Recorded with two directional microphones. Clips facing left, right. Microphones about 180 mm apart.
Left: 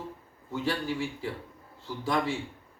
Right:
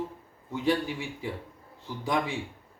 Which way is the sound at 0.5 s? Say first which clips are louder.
Right 3 dB; 15° right (ahead or behind).